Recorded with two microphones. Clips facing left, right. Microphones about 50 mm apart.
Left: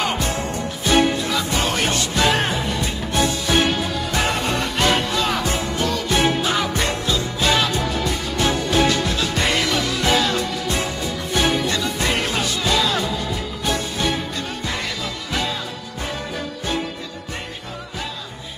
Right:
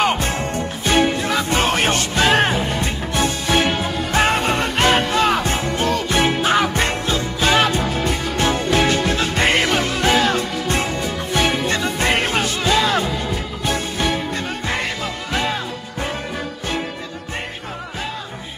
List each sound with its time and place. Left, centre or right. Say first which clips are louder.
0.0 s music: right 3 dB; right